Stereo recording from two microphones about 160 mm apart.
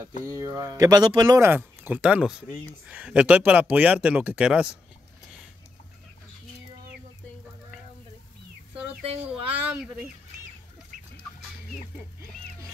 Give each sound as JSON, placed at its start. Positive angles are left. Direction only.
{"t": 0.2, "sound": "speech", "side_deg": -20}
{"t": 1.5, "sound": "speech", "side_deg": -10}
{"t": 9.3, "sound": "a sound", "side_deg": -5}